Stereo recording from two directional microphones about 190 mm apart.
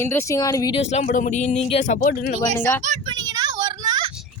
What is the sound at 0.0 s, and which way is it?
Speech, 15° left (ahead or behind).